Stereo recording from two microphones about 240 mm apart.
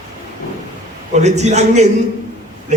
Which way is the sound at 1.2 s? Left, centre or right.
Right.